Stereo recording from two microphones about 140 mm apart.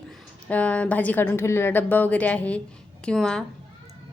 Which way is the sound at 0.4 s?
10° left (ahead or behind).